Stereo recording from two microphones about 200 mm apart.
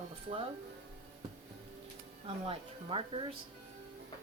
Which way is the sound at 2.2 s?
25° right (ahead or behind).